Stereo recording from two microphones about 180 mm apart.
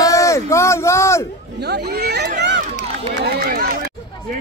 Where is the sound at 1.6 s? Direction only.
65° right (ahead or behind).